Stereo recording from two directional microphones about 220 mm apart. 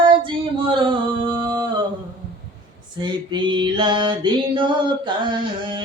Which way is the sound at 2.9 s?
20° right (ahead or behind).